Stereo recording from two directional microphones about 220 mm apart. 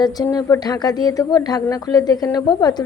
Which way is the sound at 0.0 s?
15° left (ahead or behind).